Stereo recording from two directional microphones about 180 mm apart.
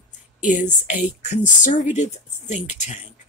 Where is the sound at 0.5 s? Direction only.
45° left (ahead or behind).